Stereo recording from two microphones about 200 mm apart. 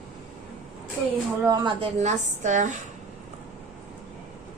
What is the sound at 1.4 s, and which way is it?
Speech, 20° right (ahead or behind).